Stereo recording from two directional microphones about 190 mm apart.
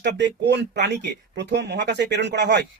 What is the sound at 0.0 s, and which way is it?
Speech, 65° right (ahead or behind).